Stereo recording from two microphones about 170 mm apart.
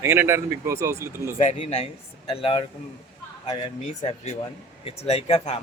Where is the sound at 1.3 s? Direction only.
40° left (ahead or behind).